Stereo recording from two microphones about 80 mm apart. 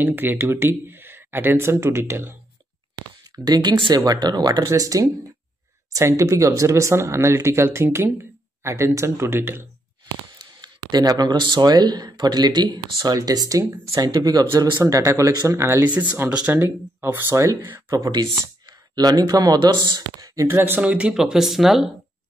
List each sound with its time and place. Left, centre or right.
0.0 s speech: right
3.4 s speech: right
4.0 s speech: right
10.4 s speech: right
15.8 s speech: centre
16.6 s speech: right
17.9 s speech: right
20.3 s speech: right
21.1 s speech: centre